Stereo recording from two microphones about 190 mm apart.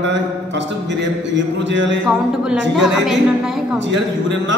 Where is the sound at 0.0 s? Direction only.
70° right (ahead or behind).